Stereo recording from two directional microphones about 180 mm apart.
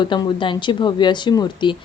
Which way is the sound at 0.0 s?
25° left (ahead or behind).